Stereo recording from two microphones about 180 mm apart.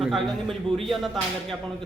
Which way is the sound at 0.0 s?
Centre (ahead or behind).